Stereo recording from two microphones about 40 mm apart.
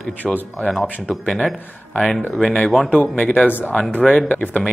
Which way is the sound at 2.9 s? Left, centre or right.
Left.